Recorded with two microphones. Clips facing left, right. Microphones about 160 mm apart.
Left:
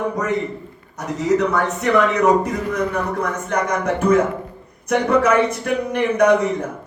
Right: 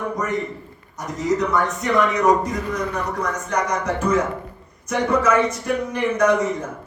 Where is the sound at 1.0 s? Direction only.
65° left (ahead or behind).